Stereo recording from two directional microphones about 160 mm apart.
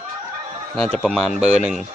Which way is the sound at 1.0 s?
5° left (ahead or behind).